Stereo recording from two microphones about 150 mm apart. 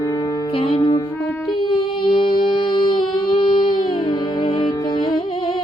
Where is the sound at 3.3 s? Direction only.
35° left (ahead or behind).